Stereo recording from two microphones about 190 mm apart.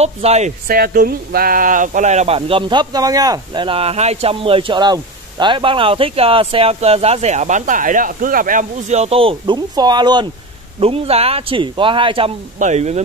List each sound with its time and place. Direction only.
0.0 s speech: 35° right (ahead or behind)
0.7 s speech: 50° right (ahead or behind); by 12.3 s 25° right (ahead or behind)
12.5 s speech: 40° right (ahead or behind)